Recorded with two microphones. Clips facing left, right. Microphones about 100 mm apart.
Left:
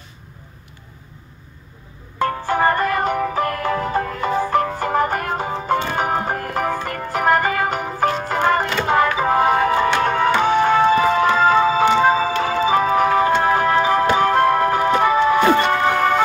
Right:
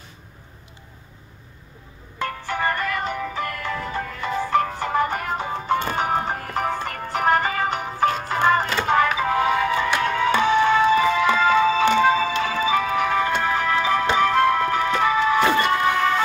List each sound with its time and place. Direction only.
2.1 s music: 45° left (ahead or behind)